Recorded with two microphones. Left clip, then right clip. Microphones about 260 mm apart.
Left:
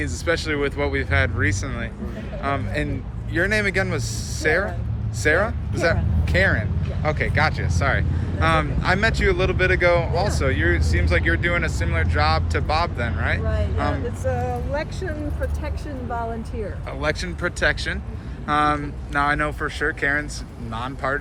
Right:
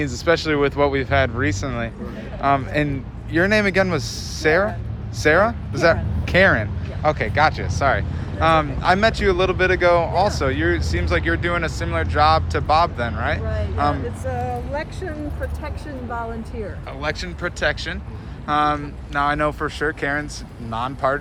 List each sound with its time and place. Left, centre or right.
0.0 s speech: centre
14.3 s speech: centre
17.0 s speech: centre